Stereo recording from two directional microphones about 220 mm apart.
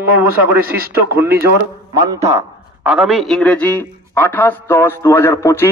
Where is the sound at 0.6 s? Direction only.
40° right (ahead or behind).